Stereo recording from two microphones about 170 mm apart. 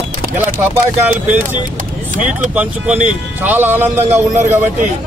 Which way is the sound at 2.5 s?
10° right (ahead or behind).